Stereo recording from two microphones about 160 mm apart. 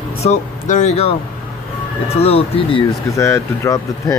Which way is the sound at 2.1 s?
40° left (ahead or behind).